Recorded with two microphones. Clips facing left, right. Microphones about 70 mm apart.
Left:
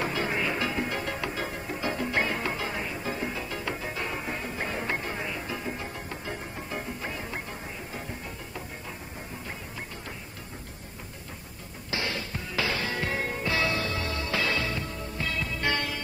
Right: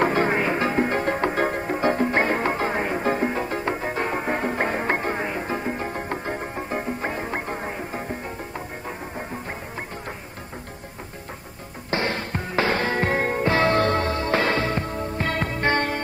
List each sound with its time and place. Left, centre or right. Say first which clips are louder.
0.0 s music: right 8 dB; right
11.9 s music: right 7 dB; right